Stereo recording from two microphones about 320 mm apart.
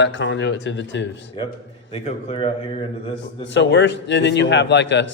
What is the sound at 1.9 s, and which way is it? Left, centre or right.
Speech, centre.